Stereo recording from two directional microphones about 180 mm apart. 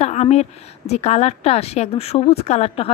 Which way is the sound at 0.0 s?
35° left (ahead or behind).